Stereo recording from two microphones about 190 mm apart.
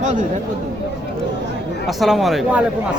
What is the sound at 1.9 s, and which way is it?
Speech, centre (ahead or behind).